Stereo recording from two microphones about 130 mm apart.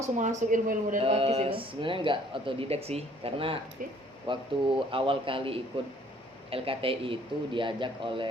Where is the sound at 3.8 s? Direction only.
90° right.